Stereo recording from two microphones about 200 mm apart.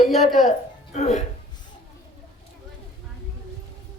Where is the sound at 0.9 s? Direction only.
35° left (ahead or behind).